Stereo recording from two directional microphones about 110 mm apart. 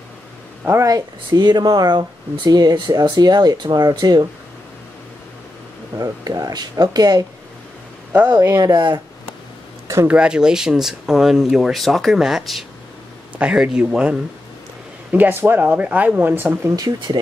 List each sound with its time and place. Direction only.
0.7 s speech: 30° right (ahead or behind)
5.9 s speech: 30° right (ahead or behind)
8.3 s speech: 25° right (ahead or behind)
8.5 s speech: 40° right (ahead or behind)
10.0 s speech: 10° right (ahead or behind)
15.1 s speech: 20° right (ahead or behind)
16.7 s speech: 35° right (ahead or behind)